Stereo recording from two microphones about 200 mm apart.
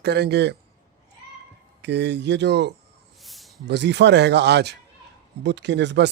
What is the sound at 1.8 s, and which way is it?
Speech, 60° right (ahead or behind).